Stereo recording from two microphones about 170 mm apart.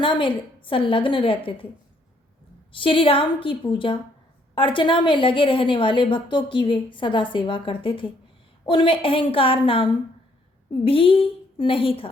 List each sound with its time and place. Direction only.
0.0 s a woman's voice: 30° left (ahead or behind)
2.7 s a woman's voice: 30° left (ahead or behind)